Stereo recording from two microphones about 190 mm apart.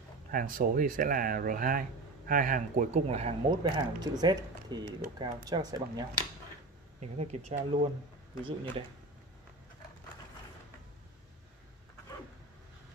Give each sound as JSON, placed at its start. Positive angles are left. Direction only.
{"t": 0.3, "sound": "speech", "side_deg": -45}
{"t": 3.4, "sound": "speech", "side_deg": -20}
{"t": 7.0, "sound": "speech", "side_deg": -35}